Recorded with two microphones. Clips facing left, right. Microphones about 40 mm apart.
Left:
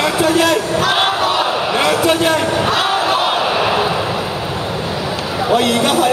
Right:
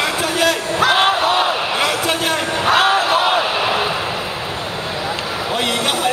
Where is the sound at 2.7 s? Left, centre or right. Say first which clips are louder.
Right 1 dB; right.